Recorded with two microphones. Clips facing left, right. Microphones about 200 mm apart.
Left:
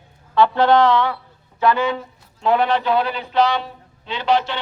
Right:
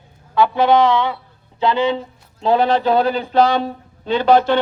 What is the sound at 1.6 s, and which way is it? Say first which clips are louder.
Speech: right 1 dB; 25° right (ahead or behind).